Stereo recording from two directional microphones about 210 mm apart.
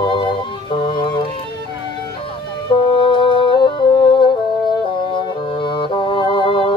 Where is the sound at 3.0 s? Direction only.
25° left (ahead or behind).